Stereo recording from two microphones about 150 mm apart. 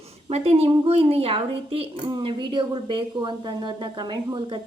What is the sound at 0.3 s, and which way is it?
Speech, 40° right (ahead or behind).